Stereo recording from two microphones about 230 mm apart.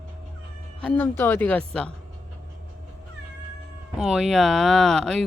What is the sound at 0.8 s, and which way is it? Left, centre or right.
Speech, centre.